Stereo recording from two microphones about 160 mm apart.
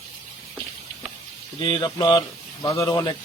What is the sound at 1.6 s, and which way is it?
Speech, 30° left (ahead or behind).